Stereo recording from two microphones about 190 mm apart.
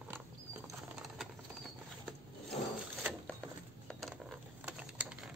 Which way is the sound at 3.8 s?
Centre (ahead or behind).